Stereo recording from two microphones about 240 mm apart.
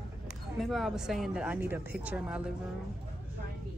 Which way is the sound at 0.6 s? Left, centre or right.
Centre.